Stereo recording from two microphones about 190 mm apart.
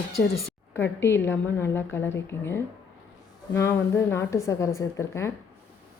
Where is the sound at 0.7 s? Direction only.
10° left (ahead or behind).